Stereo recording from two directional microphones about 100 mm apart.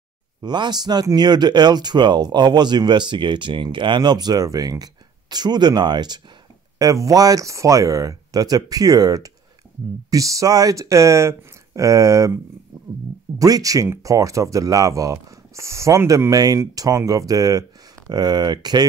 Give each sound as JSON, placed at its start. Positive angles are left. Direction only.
{"t": 0.4, "sound": "speech", "side_deg": -45}
{"t": 6.8, "sound": "speech", "side_deg": -35}
{"t": 13.4, "sound": "speech", "side_deg": -35}